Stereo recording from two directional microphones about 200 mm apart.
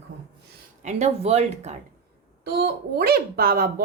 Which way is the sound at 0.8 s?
35° right (ahead or behind).